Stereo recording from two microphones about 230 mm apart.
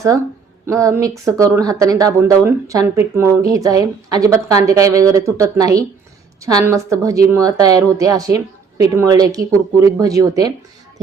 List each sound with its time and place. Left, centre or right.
0.6 s speech: centre